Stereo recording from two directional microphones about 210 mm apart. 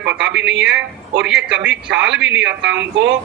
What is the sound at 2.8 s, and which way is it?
Speech, 60° right (ahead or behind).